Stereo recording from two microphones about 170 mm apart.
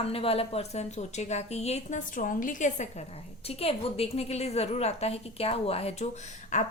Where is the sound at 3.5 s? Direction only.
35° left (ahead or behind).